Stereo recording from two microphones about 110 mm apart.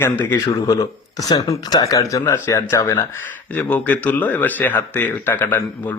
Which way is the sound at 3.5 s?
15° left (ahead or behind).